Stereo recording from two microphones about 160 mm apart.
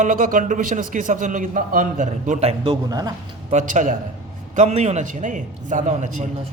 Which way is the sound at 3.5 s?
50° right (ahead or behind).